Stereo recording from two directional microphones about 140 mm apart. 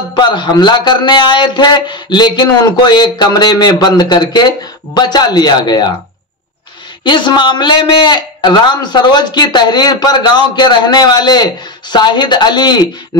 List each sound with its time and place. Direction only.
0.1 s a man's voice: 35° left (ahead or behind)
7.1 s a man's voice: 35° left (ahead or behind)